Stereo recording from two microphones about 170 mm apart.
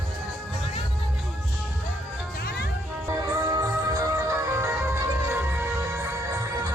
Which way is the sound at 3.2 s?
20° right (ahead or behind).